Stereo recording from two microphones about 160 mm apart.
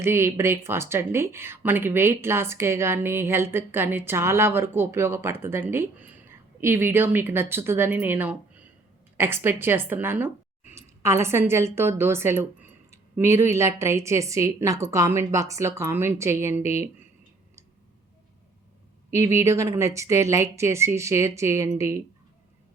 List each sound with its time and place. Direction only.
0.0 s speech: 15° right (ahead or behind)
19.1 s speech: 15° right (ahead or behind)